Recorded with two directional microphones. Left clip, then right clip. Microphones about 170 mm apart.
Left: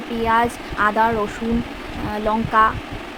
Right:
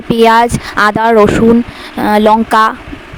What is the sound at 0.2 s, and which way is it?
Speech, 65° right (ahead or behind).